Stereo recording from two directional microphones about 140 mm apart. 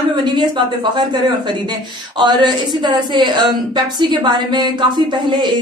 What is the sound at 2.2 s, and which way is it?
Speech, 35° right (ahead or behind).